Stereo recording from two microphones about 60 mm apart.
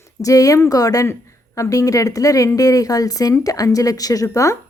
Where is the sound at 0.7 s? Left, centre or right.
Left.